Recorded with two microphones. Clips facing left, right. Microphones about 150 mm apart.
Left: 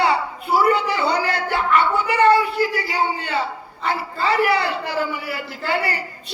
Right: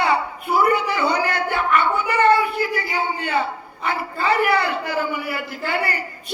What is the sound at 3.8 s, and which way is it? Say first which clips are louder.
A man's voice: left 1 dB; 50° right (ahead or behind).